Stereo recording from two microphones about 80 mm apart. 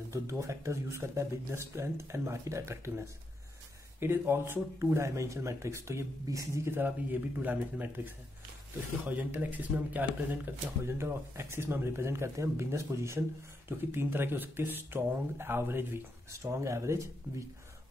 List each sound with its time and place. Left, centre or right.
0.1 s speech: right